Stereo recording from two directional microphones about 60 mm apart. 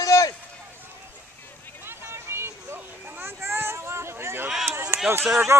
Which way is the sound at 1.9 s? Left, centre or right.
Right.